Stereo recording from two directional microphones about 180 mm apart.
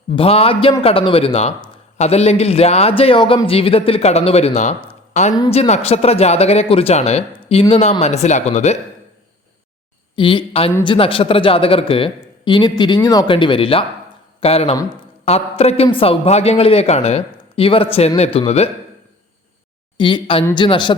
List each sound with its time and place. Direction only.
0.2 s a man's voice: 30° left (ahead or behind)
10.2 s a man's voice: 30° left (ahead or behind)
20.0 s speech: 25° left (ahead or behind)